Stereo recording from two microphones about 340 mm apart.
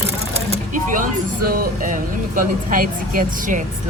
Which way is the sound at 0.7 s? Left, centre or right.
Right.